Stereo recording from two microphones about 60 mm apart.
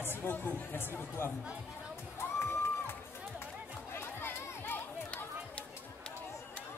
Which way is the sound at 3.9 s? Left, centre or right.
Left.